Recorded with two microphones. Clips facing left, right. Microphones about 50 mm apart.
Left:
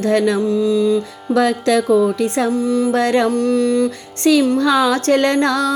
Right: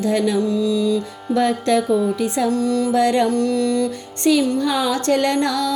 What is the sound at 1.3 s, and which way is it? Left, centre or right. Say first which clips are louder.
Speech: left 3 dB; left.